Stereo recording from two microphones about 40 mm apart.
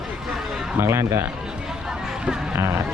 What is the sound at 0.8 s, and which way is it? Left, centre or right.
Speech, right.